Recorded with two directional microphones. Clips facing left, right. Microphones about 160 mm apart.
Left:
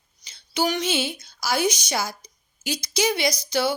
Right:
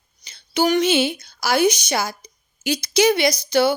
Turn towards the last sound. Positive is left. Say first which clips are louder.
# right 6 dB
turn(degrees=-60)  # may be behind; listen again after turning